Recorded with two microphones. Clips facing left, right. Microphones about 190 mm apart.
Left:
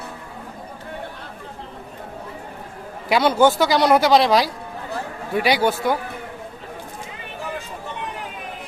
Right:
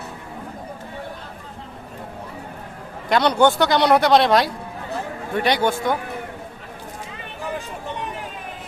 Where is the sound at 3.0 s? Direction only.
5° left (ahead or behind).